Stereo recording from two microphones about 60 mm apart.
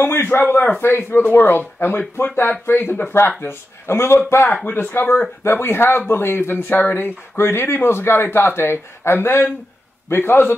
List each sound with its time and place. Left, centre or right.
0.0 s speech: left